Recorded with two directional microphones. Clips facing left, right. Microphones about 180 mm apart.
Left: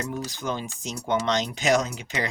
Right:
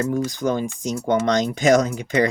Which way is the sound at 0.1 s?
50° right (ahead or behind).